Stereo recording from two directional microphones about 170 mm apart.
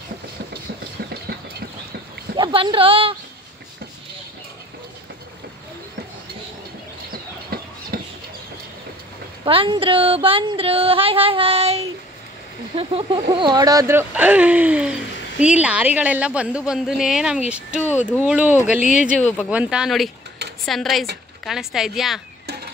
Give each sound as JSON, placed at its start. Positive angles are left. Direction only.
{"t": 2.3, "sound": "speech", "side_deg": -30}
{"t": 7.1, "sound": "a sound", "side_deg": -65}
{"t": 9.4, "sound": "music", "side_deg": -30}
{"t": 12.7, "sound": "speech", "side_deg": -30}
{"t": 19.1, "sound": "speech", "side_deg": 10}
{"t": 19.5, "sound": "speech", "side_deg": -5}